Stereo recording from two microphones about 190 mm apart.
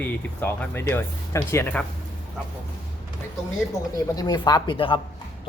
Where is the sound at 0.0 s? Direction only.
10° left (ahead or behind).